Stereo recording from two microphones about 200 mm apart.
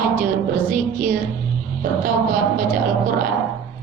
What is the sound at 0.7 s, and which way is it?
Speech, 45° right (ahead or behind).